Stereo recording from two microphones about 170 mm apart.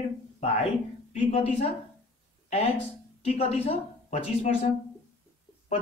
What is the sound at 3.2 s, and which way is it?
A woman's voice, 35° left (ahead or behind).